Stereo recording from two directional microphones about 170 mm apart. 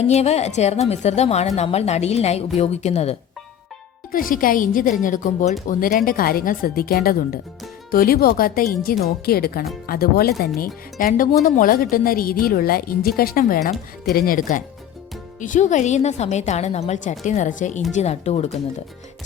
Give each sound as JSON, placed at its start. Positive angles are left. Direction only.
{"t": 0.0, "sound": "a woman's voice", "side_deg": 40}
{"t": 4.1, "sound": "a woman's voice", "side_deg": 55}